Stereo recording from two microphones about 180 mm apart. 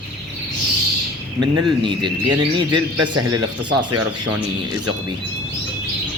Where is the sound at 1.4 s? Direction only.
25° right (ahead or behind).